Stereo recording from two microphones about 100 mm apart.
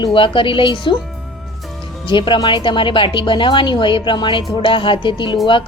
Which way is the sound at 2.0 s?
55° left (ahead or behind).